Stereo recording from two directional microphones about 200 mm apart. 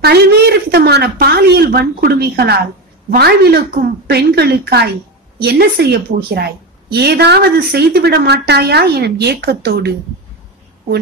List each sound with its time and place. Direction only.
0.0 s speech: 55° right (ahead or behind)